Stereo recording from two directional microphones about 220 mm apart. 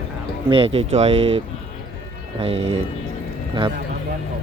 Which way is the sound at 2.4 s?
25° right (ahead or behind).